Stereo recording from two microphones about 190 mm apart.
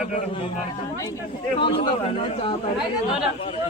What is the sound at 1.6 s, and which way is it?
Speech, 25° left (ahead or behind).